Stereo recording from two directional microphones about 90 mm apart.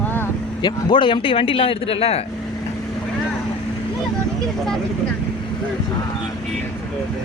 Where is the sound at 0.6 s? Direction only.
60° left (ahead or behind); by 2.1 s 90° left.